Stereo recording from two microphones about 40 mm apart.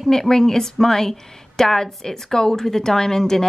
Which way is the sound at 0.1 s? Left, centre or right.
Centre.